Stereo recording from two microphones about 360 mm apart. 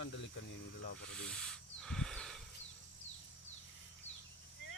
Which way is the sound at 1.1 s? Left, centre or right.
Centre.